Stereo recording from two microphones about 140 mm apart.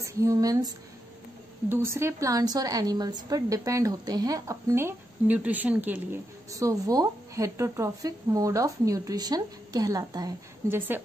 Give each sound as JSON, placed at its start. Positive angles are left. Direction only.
{"t": 0.0, "sound": "a woman's voice", "side_deg": -20}
{"t": 6.5, "sound": "a woman's voice", "side_deg": -25}